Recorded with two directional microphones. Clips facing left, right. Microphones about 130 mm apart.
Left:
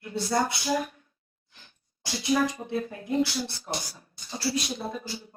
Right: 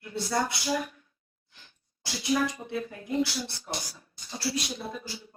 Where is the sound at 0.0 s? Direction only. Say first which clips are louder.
Left 3 dB; 30° left (ahead or behind).